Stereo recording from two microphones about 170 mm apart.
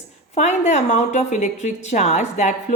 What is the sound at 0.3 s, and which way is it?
A woman's voice, 45° left (ahead or behind).